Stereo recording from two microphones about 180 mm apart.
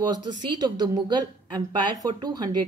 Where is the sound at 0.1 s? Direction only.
25° right (ahead or behind).